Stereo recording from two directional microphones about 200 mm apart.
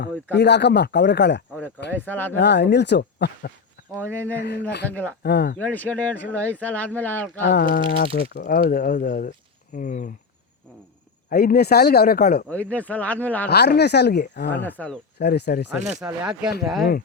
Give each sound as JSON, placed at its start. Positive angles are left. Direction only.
{"t": 0.3, "sound": "speech", "side_deg": 60}
{"t": 1.9, "sound": "speech", "side_deg": 10}
{"t": 2.3, "sound": "speech", "side_deg": 60}
{"t": 3.9, "sound": "speech", "side_deg": 10}
{"t": 5.2, "sound": "speech", "side_deg": 55}
{"t": 5.5, "sound": "speech", "side_deg": 10}
{"t": 7.5, "sound": "speech", "side_deg": 55}
{"t": 11.3, "sound": "speech", "side_deg": 50}
{"t": 12.5, "sound": "speech", "side_deg": 5}
{"t": 13.5, "sound": "speech", "side_deg": 55}
{"t": 14.5, "sound": "speech", "side_deg": 10}
{"t": 15.2, "sound": "speech", "side_deg": 55}
{"t": 16.0, "sound": "speech", "side_deg": -5}